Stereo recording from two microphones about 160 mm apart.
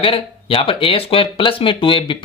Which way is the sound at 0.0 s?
35° left (ahead or behind).